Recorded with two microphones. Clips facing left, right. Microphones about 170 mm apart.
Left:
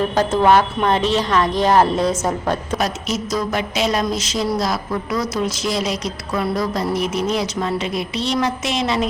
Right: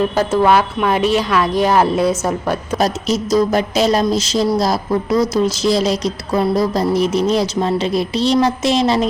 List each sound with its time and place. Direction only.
0.5 s speech: 10° right (ahead or behind)
2.7 s a woman's voice: 35° right (ahead or behind)